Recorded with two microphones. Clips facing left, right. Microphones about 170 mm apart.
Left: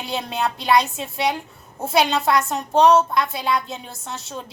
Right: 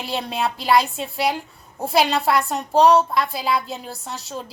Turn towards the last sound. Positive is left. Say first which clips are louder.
# right 1 dB
turn(degrees=0)  # may be behind; listen again after turning